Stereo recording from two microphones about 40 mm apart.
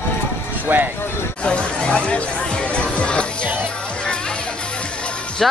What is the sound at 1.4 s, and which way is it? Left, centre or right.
Speech, left.